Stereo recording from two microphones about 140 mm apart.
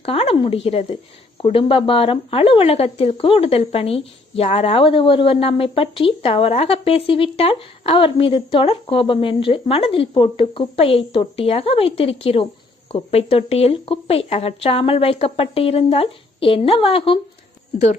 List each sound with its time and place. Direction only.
0.0 s a woman's voice: 45° left (ahead or behind)